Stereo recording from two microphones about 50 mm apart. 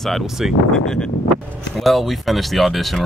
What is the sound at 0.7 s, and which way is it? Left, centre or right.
Speech, centre.